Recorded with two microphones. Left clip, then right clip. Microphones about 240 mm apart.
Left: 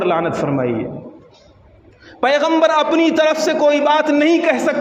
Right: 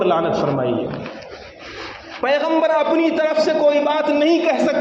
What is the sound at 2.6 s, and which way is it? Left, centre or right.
A man's voice, left.